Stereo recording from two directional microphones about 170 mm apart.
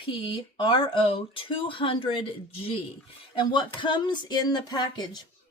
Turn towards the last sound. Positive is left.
turn(degrees=25)  # may be behind; listen again after turning